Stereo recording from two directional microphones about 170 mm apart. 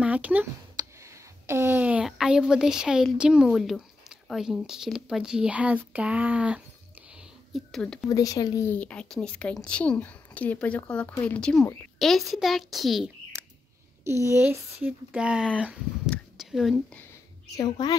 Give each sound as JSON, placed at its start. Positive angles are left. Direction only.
{"t": 0.0, "sound": "speech", "side_deg": -10}
{"t": 8.1, "sound": "speech", "side_deg": 20}
{"t": 14.0, "sound": "speech", "side_deg": -15}
{"t": 16.1, "sound": "a sound", "side_deg": 0}
{"t": 17.6, "sound": "a woman's voice", "side_deg": 25}